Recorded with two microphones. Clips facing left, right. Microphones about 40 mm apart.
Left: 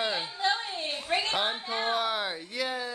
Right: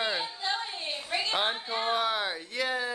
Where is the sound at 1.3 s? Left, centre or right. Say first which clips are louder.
Even; centre.